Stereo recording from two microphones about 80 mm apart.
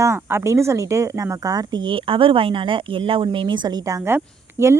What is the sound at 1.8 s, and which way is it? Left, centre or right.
Speech, right.